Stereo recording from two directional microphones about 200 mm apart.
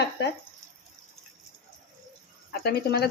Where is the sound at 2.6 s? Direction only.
50° left (ahead or behind).